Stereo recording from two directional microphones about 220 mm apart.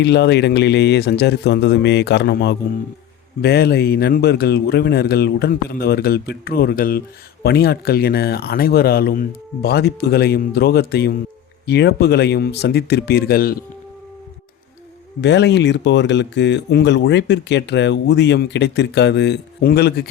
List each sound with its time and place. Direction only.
0.0 s speech: 50° left (ahead or behind)
15.2 s speech: 50° left (ahead or behind)